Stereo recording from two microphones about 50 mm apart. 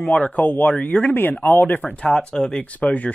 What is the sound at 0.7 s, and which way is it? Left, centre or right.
Speech, left.